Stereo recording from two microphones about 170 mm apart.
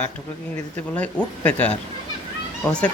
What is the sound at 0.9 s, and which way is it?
Speech, 5° left (ahead or behind).